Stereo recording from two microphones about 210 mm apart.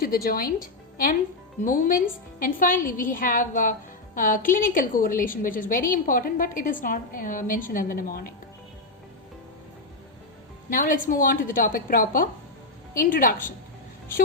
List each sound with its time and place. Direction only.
0.0 s a woman's voice: 45° left (ahead or behind)
10.7 s a woman's voice: 40° left (ahead or behind)